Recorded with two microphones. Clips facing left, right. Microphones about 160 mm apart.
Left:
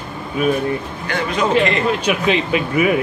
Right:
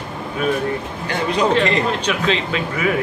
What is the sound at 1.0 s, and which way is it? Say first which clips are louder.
Speech: right 2 dB; 35° right (ahead or behind).